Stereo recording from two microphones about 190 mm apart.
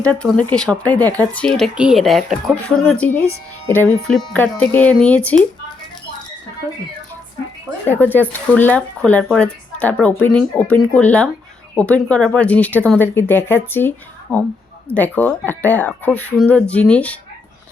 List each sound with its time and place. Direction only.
0.0 s speech: 5° left (ahead or behind)
7.9 s speech: 10° left (ahead or behind)